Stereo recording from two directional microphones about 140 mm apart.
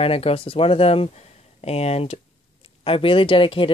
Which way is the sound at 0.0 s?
45° left (ahead or behind).